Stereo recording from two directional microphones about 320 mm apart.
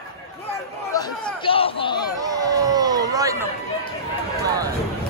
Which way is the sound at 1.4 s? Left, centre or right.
Centre.